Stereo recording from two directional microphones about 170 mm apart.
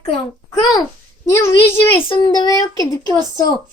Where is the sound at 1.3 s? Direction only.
15° left (ahead or behind).